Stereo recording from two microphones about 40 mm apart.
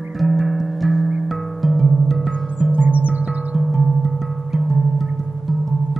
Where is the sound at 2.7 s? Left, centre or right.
Right.